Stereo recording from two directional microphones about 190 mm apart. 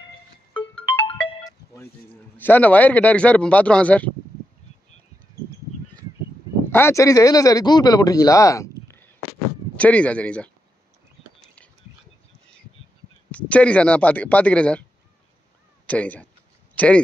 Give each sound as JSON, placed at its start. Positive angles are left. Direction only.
{"t": 0.8, "sound": "music", "side_deg": 30}
{"t": 2.3, "sound": "speech", "side_deg": 10}
{"t": 6.7, "sound": "speech", "side_deg": 15}
{"t": 13.3, "sound": "speech", "side_deg": 5}
{"t": 15.9, "sound": "speech", "side_deg": 10}